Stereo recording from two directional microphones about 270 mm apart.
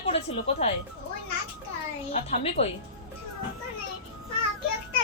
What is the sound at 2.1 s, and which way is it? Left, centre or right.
Speech, left.